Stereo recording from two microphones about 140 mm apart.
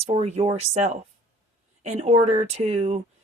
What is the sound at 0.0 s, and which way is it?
Speech, 50° right (ahead or behind).